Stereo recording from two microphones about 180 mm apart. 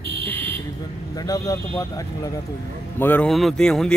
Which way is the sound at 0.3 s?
10° left (ahead or behind).